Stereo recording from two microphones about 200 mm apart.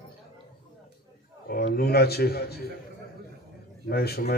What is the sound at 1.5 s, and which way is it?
A man's voice, 50° left (ahead or behind).